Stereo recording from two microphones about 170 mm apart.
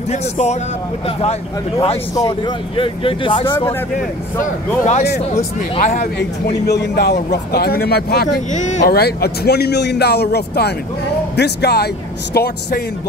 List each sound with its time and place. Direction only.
0.1 s speech: 40° left (ahead or behind)
2.1 s speech: 25° left (ahead or behind)
3.9 s speech: 45° left (ahead or behind)
6.1 s a man's voice: 75° left (ahead or behind)
8.5 s speech: 45° left (ahead or behind)
8.9 s a man's voice: 65° left (ahead or behind)